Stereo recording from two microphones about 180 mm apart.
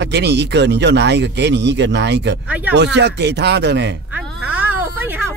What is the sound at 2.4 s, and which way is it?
Speech, 10° right (ahead or behind).